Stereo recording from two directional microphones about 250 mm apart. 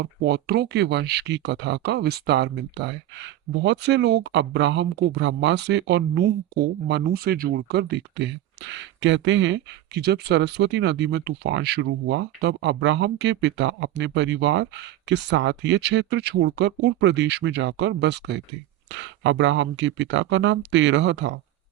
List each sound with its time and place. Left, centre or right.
0.0 s speech: right